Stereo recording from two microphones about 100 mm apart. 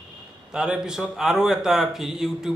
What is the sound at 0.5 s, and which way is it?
Speech, 10° right (ahead or behind).